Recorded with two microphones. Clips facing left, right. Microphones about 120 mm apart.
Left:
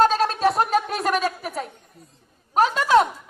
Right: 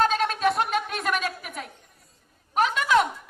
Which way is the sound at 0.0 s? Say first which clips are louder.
Left 4 dB; 35° left (ahead or behind).